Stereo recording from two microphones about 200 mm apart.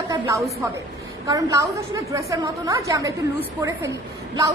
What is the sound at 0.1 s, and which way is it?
A woman's voice, 15° right (ahead or behind).